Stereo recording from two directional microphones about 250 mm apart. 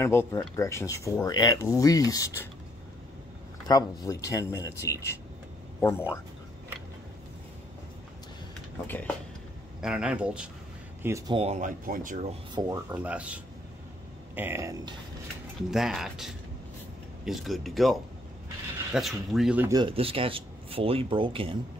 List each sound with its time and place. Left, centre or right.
0.0 s speech: centre
3.6 s speech: centre
8.8 s speech: centre
9.8 s speech: centre; by 12.3 s right
12.5 s speech: centre
15.7 s speech: centre
18.9 s speech: centre; by 21.5 s right